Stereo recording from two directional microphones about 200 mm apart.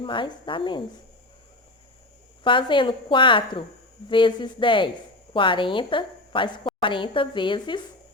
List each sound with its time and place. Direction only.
0.0 s a woman's voice: 25° left (ahead or behind)
2.4 s a woman's voice: 25° left (ahead or behind)